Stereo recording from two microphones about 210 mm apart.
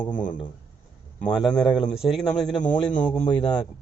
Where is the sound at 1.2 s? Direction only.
5° left (ahead or behind).